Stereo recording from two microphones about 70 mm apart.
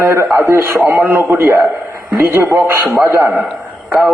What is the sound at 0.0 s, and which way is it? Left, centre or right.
A man's voice, right.